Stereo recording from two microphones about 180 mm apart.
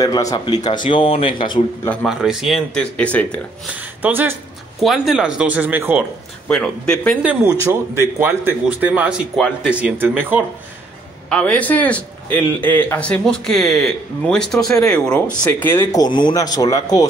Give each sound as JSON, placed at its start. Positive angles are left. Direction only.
{"t": 0.0, "sound": "speech", "side_deg": 20}
{"t": 2.0, "sound": "a man's voice", "side_deg": -5}
{"t": 4.0, "sound": "speech", "side_deg": -10}
{"t": 6.5, "sound": "a man's voice", "side_deg": 5}
{"t": 7.2, "sound": "speech", "side_deg": -15}
{"t": 11.2, "sound": "a man's voice", "side_deg": 5}